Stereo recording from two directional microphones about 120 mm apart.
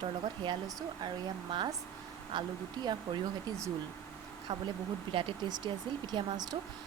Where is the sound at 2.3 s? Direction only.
40° right (ahead or behind).